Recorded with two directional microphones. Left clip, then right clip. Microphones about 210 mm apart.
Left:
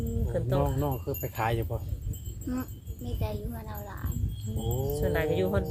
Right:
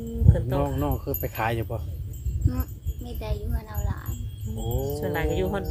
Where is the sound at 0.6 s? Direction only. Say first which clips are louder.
Right 2 dB; 40° right (ahead or behind).